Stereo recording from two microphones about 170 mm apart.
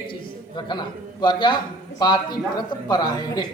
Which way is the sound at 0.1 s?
25° left (ahead or behind).